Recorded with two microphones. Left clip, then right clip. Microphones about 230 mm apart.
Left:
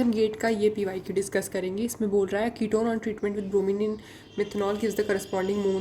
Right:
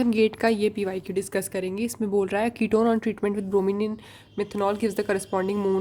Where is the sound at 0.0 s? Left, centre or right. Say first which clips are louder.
Right 3 dB; right.